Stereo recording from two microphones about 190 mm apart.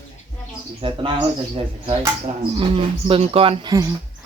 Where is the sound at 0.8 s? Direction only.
25° right (ahead or behind).